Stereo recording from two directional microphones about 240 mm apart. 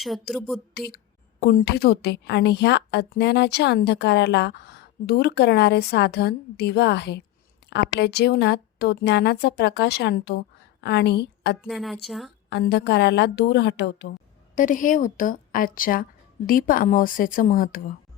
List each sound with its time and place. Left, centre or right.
0.0 s a woman's voice: centre
0.7 s a woman's voice: left
11.6 s a woman's voice: centre
12.5 s a woman's voice: left
14.5 s a woman's voice: left